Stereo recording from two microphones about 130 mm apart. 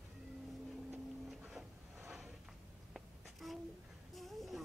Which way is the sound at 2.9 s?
Centre (ahead or behind).